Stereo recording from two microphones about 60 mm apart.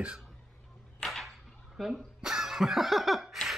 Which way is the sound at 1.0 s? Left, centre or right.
Centre.